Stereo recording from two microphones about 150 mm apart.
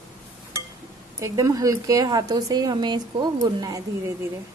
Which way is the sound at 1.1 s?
20° right (ahead or behind).